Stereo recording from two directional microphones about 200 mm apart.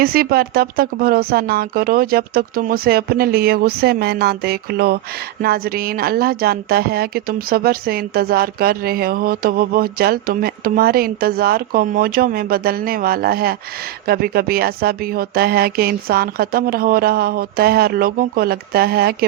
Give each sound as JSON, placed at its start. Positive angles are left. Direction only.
{"t": 0.0, "sound": "speech", "side_deg": -50}